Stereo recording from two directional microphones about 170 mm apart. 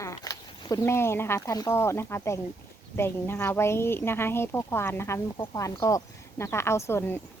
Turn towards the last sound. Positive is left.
turn(degrees=15)  # may be behind; listen again after turning